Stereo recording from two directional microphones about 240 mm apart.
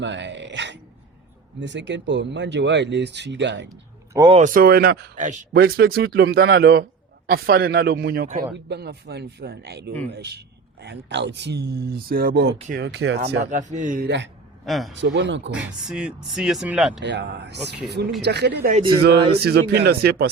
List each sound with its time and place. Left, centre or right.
0.0 s speech: right
4.1 s speech: centre
4.4 s a man's voice: right
12.5 s speech: right
12.8 s speech: right
13.4 s a man's voice: right
14.6 s a man's voice: centre
14.9 s speech: right
15.5 s speech: centre
17.0 s speech: right
18.7 s speech: right
19.3 s a man's voice: right